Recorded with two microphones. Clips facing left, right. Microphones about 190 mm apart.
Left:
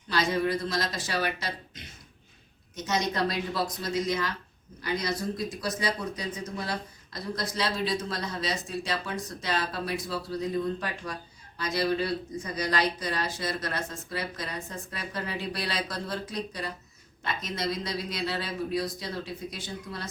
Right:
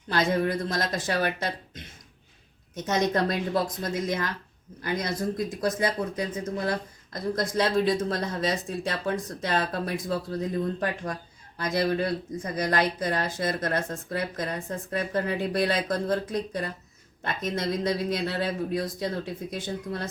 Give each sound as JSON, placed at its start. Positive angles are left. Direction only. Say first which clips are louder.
{"t": 0.1, "sound": "speech", "louder": "right 2 dB", "side_deg": -55}